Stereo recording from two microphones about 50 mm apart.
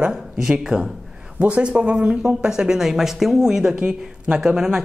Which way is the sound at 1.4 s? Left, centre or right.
Right.